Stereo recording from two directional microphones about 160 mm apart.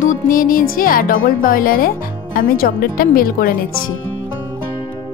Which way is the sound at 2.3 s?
65° left (ahead or behind).